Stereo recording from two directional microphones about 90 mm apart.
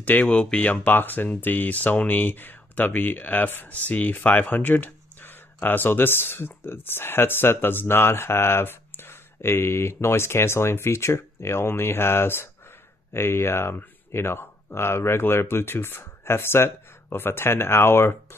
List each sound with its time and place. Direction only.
0.0 s speech: 20° left (ahead or behind)